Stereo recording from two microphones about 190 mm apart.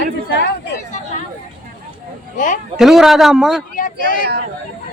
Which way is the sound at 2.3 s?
40° left (ahead or behind).